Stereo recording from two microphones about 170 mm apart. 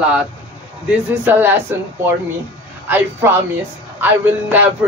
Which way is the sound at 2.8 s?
10° right (ahead or behind).